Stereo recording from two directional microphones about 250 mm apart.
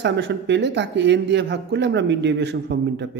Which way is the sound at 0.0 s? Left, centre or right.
Right.